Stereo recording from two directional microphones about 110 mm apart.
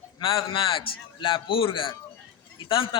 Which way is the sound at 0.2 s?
50° left (ahead or behind).